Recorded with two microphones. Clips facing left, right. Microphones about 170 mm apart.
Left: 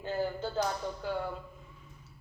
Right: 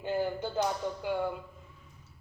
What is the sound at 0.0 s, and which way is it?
Speech, 15° right (ahead or behind).